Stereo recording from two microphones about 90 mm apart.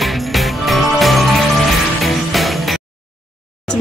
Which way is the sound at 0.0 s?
Centre (ahead or behind).